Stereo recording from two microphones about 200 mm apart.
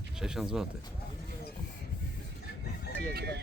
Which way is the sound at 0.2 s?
5° right (ahead or behind).